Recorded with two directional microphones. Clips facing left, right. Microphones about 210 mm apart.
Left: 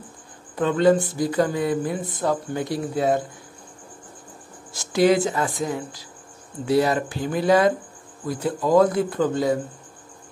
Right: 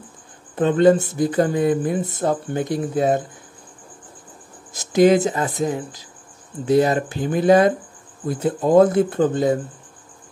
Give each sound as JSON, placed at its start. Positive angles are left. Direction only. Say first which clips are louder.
{"t": 0.8, "sound": "speech", "louder": "right 2 dB", "side_deg": -25}
{"t": 4.7, "sound": "speech", "louder": "right 4 dB", "side_deg": -20}